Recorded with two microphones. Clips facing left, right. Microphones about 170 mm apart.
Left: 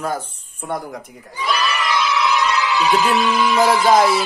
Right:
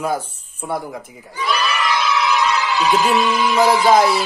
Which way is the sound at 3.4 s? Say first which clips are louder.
Even; centre (ahead or behind).